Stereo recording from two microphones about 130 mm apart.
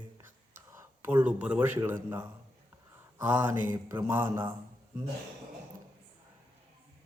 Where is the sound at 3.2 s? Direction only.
15° right (ahead or behind).